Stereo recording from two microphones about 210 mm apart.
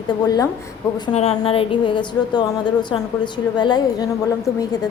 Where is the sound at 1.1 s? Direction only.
30° left (ahead or behind).